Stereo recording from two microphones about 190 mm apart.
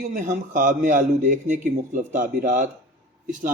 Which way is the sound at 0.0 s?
40° right (ahead or behind).